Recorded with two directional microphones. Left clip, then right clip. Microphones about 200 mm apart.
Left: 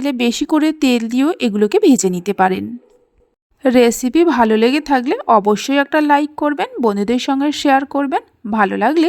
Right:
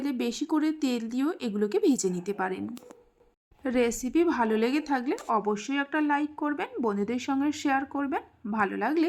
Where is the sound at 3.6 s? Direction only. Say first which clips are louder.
Left 15 dB; 40° left (ahead or behind).